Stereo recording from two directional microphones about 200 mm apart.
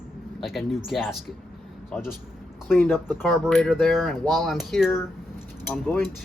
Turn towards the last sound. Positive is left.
turn(degrees=5)  # may be behind; listen again after turning